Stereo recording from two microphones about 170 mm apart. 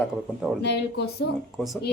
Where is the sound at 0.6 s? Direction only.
85° left.